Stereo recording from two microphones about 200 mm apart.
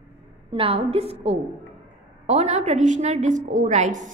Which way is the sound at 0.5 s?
30° right (ahead or behind).